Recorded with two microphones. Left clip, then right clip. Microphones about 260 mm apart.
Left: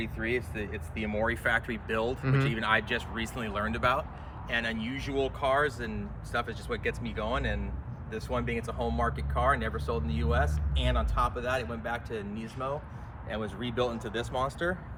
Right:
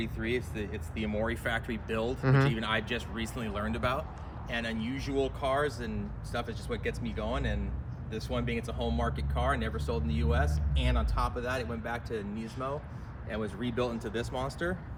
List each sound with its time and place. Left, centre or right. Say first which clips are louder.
0.0 s speech: left 2 dB; centre